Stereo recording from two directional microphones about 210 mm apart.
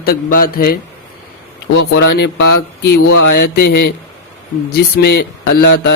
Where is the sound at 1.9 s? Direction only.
55° left (ahead or behind).